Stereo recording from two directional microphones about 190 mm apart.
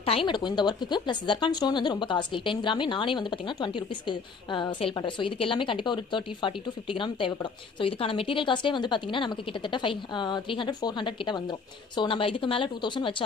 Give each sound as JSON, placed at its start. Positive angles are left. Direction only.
{"t": 0.0, "sound": "speech", "side_deg": 30}